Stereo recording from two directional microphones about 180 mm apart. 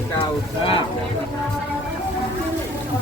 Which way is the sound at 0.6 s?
30° left (ahead or behind).